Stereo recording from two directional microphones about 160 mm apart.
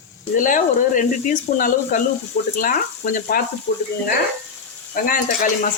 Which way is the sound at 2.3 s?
45° left (ahead or behind).